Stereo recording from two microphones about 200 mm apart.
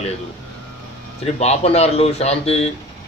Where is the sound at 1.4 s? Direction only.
30° left (ahead or behind).